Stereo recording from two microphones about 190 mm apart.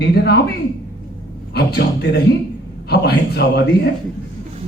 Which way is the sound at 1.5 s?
60° left (ahead or behind).